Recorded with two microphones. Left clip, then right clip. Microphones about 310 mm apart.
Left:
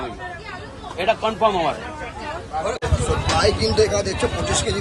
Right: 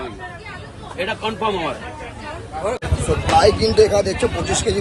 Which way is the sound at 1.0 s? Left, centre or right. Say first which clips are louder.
Left 4 dB; centre.